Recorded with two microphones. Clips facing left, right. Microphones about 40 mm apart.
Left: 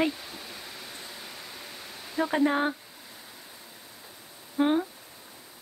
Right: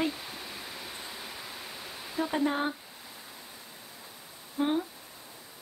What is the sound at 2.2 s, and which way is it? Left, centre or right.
Speech, centre.